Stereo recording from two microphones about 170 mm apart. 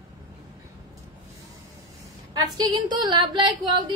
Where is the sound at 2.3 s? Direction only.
25° right (ahead or behind).